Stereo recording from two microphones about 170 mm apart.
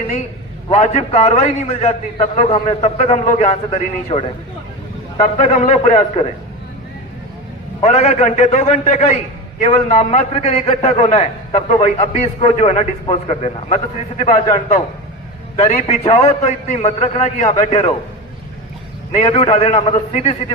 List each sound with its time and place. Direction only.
0.7 s a man's voice: 40° left (ahead or behind)
7.8 s a man's voice: 45° left (ahead or behind)
19.1 s a man's voice: 35° left (ahead or behind)